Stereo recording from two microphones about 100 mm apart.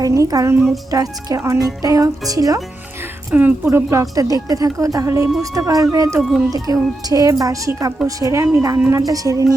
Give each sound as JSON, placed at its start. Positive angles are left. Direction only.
{"t": 0.0, "sound": "speech", "side_deg": -35}
{"t": 3.3, "sound": "speech", "side_deg": -15}
{"t": 3.7, "sound": "speech", "side_deg": -25}